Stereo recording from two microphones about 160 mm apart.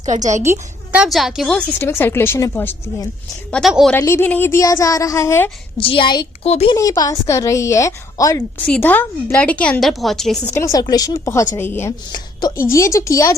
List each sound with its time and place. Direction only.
0.0 s a woman's voice: 50° right (ahead or behind)
0.9 s a woman's voice: centre (ahead or behind); by 3.1 s 15° left (ahead or behind)
3.5 s a woman's voice: centre (ahead or behind)
3.9 s a woman's voice: 15° left (ahead or behind)
5.7 s a woman's voice: 30° left (ahead or behind)
6.5 s speech: 40° left (ahead or behind)
6.7 s a woman's voice: 20° left (ahead or behind)
8.6 s a woman's voice: 10° left (ahead or behind)
10.5 s a woman's voice: 20° left (ahead or behind)
12.1 s a woman's voice: 25° left (ahead or behind)